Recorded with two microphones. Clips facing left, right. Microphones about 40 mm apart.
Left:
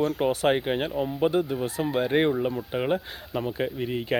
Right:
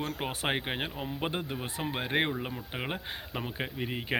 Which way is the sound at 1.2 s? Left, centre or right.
Right.